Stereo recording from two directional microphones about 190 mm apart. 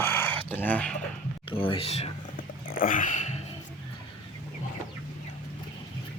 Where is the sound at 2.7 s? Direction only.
45° left (ahead or behind).